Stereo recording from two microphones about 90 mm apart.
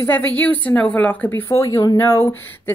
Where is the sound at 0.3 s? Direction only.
15° left (ahead or behind).